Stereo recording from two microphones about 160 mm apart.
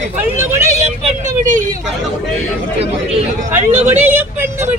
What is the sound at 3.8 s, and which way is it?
Speech, 10° right (ahead or behind).